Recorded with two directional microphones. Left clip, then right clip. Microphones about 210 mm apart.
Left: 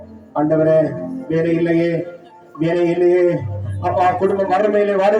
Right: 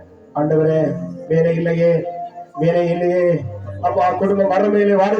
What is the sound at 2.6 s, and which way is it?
A man's voice, 55° left (ahead or behind).